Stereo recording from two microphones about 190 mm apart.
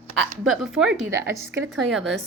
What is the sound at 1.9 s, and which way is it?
Speech, centre (ahead or behind).